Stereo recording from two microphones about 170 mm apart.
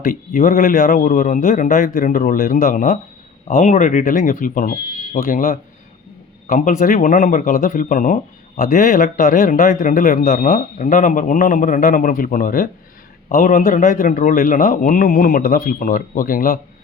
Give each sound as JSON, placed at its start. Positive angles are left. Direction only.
{"t": 0.0, "sound": "a man's voice", "side_deg": 55}